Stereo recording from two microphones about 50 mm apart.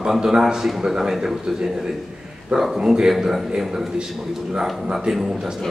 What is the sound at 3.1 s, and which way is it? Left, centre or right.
Speech, centre.